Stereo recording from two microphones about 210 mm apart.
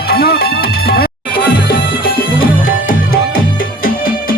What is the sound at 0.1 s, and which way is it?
Music, 45° left (ahead or behind).